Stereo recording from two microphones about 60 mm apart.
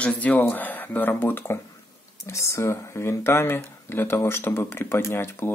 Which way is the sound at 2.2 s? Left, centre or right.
Left.